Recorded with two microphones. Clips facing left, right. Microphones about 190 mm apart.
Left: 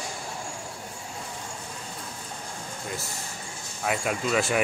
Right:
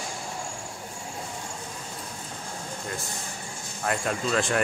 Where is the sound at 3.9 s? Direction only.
5° left (ahead or behind).